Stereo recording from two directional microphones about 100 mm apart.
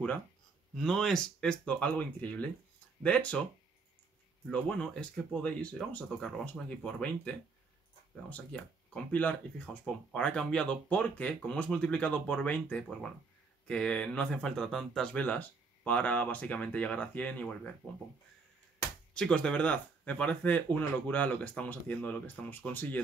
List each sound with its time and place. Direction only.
0.7 s speech: 5° left (ahead or behind)
4.5 s speech: 10° left (ahead or behind)
19.1 s speech: 10° left (ahead or behind)